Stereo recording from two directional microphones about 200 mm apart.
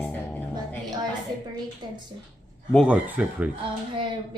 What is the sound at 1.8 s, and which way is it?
Speech, 20° right (ahead or behind).